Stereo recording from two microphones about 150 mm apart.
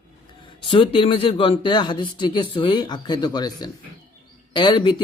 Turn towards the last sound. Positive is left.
turn(degrees=30)  # may be behind; listen again after turning